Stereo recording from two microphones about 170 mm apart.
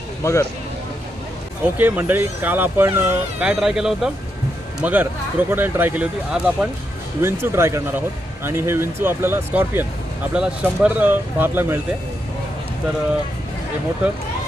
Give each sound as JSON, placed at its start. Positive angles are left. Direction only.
{"t": 0.2, "sound": "speech", "side_deg": 15}
{"t": 1.6, "sound": "speech", "side_deg": -10}